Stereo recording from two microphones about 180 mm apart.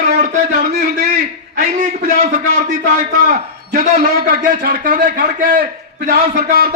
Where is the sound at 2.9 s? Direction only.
50° right (ahead or behind).